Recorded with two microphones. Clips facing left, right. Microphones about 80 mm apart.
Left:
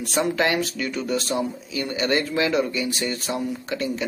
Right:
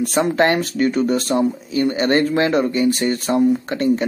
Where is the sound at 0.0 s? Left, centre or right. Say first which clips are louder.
Right 6 dB; right.